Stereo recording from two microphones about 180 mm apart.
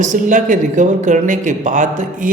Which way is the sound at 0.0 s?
45° right (ahead or behind).